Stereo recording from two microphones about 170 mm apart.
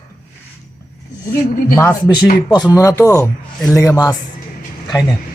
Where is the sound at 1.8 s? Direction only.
15° left (ahead or behind).